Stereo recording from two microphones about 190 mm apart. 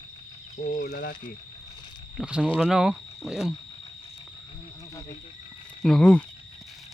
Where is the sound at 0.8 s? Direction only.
65° left (ahead or behind).